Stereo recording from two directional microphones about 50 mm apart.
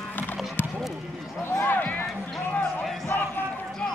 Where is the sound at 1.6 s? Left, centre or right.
Left.